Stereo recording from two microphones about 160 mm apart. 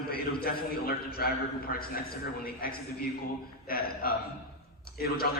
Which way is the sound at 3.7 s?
65° left (ahead or behind).